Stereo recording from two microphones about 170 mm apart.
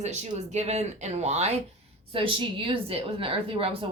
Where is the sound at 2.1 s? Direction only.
30° right (ahead or behind).